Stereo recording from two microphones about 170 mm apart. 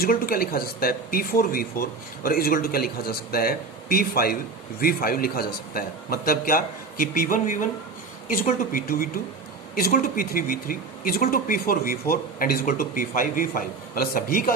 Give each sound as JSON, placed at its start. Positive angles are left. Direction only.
{"t": 0.0, "sound": "speech", "side_deg": 60}
{"t": 8.7, "sound": "speech", "side_deg": 60}